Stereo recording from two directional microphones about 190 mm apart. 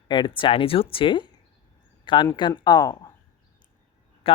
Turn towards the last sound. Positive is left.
turn(degrees=30)  # may be behind; listen again after turning